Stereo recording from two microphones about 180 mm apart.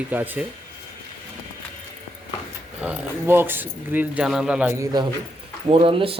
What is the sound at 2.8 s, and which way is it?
Speech, 5° right (ahead or behind).